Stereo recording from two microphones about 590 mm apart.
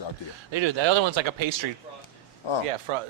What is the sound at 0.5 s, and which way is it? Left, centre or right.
Speech, right.